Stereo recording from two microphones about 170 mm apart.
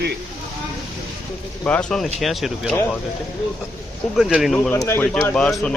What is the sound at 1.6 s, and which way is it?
Speech, 5° left (ahead or behind).